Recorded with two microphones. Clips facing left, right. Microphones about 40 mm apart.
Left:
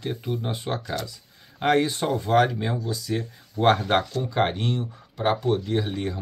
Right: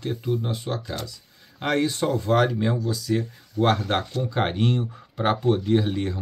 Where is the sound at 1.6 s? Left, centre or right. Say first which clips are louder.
Left 2 dB; centre.